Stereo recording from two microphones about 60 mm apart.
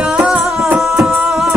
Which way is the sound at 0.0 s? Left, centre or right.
Centre.